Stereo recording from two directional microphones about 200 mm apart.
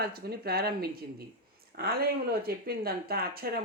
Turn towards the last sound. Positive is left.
turn(degrees=-50)  # may be behind; listen again after turning